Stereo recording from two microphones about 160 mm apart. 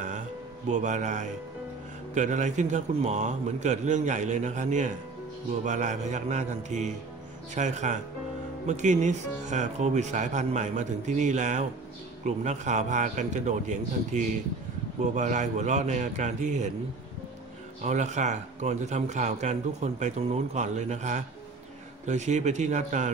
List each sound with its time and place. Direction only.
0.7 s a man's voice: 50° right (ahead or behind)
17.8 s a man's voice: 50° right (ahead or behind)